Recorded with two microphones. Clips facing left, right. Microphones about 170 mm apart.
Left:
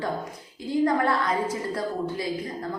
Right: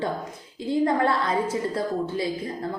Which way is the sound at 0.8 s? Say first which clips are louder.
Even; 25° right (ahead or behind).